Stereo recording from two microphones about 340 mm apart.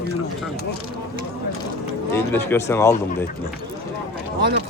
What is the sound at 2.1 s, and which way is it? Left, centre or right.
Speech, centre.